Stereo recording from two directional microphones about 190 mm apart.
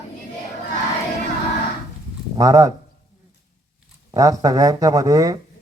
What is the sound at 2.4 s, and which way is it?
Speech, 20° right (ahead or behind).